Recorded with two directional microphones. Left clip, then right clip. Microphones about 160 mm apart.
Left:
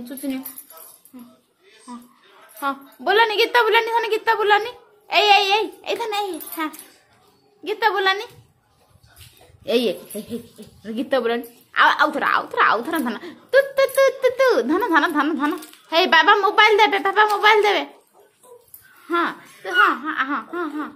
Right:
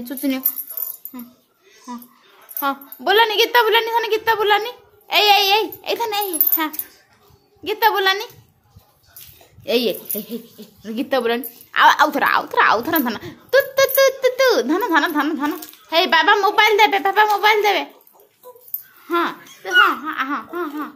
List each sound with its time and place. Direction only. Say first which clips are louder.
0.0 s speech: right 5 dB; 25° right (ahead or behind)
2.6 s a woman's voice: right 2 dB; 10° right (ahead or behind)
9.6 s speech: right 1 dB; centre (ahead or behind)
11.7 s a woman's voice: right 3 dB; 20° right (ahead or behind); by 17.8 s 5° left (ahead or behind)
19.0 s speech: right 1 dB; centre (ahead or behind)